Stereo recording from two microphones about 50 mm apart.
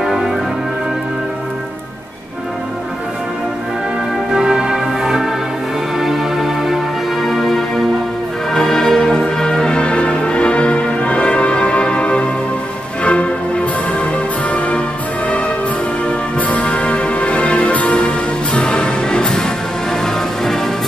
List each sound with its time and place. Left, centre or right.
4.3 s music: centre